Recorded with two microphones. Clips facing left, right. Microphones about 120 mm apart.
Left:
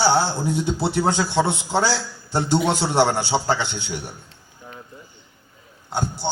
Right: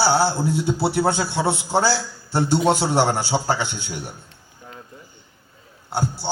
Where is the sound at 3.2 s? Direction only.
15° right (ahead or behind).